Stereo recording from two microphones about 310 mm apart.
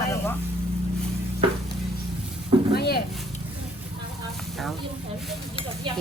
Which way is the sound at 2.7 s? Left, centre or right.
Left.